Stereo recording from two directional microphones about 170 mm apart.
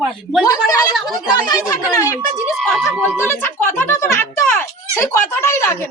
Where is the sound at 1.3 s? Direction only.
20° left (ahead or behind).